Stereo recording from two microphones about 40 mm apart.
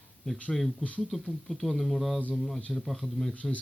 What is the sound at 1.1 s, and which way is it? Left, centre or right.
Speech, centre.